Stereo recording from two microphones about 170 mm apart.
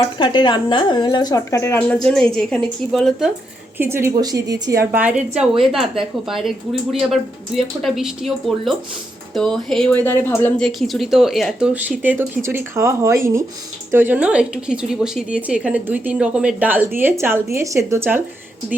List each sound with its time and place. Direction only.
0.2 s a woman's voice: 25° left (ahead or behind); by 3.3 s centre (ahead or behind)
3.8 s a woman's voice: 15° right (ahead or behind)
4.8 s a woman's voice: 10° right (ahead or behind); by 10.7 s 10° left (ahead or behind)
10.7 s a woman's voice: centre (ahead or behind)